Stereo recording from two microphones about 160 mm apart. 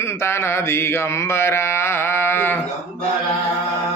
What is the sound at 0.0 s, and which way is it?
Mantra, 15° left (ahead or behind).